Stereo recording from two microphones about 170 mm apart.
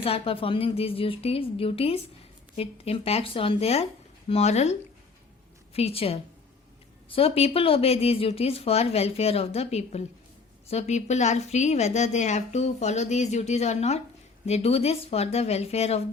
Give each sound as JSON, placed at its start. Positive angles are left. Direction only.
{"t": 0.0, "sound": "a woman's voice", "side_deg": 35}